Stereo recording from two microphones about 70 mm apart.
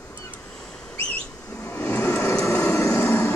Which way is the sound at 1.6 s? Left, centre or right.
Left.